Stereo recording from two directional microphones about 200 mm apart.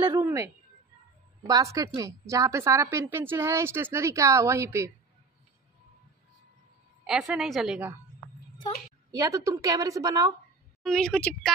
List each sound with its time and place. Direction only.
0.2 s a woman's voice: 10° right (ahead or behind)
1.5 s a woman's voice: 15° right (ahead or behind)
7.1 s a woman's voice: 5° right (ahead or behind)
9.1 s a woman's voice: 15° right (ahead or behind)
10.8 s a woman's voice: 5° left (ahead or behind)